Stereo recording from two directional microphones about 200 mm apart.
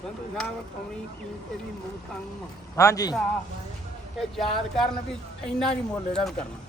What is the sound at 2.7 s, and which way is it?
Speech, 15° left (ahead or behind).